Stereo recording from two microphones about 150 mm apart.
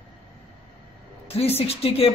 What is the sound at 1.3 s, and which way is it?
Speech, 40° left (ahead or behind).